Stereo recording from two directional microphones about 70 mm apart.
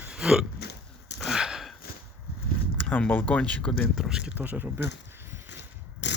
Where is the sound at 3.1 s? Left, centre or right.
Left.